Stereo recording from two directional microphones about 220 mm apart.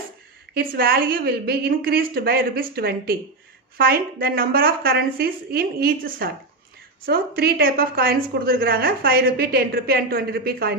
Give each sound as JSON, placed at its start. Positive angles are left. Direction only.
{"t": 0.5, "sound": "a woman's voice", "side_deg": -45}